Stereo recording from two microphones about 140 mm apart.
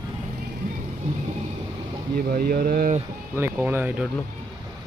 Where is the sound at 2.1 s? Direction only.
90° right.